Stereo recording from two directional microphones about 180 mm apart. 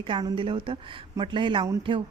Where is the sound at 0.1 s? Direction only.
25° right (ahead or behind).